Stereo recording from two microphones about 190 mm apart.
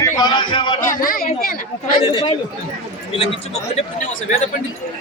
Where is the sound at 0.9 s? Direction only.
50° left (ahead or behind).